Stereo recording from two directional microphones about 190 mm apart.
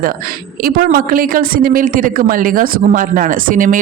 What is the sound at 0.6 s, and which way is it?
A man's voice, 50° right (ahead or behind).